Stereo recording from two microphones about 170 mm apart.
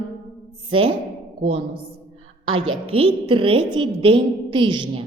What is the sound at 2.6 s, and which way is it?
A woman's voice, 35° right (ahead or behind).